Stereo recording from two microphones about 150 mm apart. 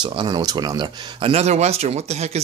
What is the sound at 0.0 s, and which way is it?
Speech, 30° right (ahead or behind).